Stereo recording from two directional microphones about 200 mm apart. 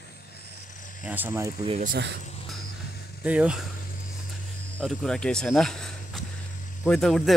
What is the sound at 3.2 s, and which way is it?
Speech, 5° right (ahead or behind).